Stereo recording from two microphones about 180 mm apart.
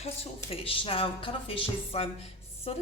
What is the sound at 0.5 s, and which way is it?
Speech, 30° left (ahead or behind).